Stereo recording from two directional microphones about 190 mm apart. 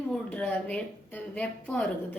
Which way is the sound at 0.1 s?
5° left (ahead or behind).